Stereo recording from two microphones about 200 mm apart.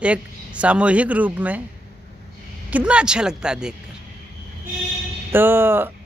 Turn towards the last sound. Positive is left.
turn(degrees=-10)  # may be behind; listen again after turning